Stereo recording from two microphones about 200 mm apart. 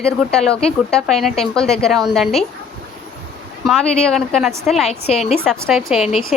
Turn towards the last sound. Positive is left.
turn(degrees=0)  # may be behind; listen again after turning